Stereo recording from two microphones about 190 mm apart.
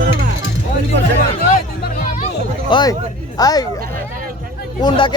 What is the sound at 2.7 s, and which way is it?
Speech, 25° left (ahead or behind).